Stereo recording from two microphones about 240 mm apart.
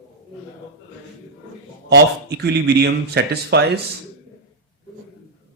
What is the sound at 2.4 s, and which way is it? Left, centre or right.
Speech, right.